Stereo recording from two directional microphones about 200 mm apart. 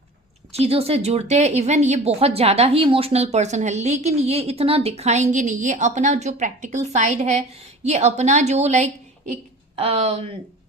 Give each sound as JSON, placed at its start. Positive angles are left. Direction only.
{"t": 0.6, "sound": "speech", "side_deg": -30}